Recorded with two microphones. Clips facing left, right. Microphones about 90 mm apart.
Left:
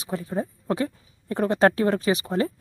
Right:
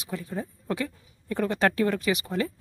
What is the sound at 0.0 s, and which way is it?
Speech, 35° left (ahead or behind).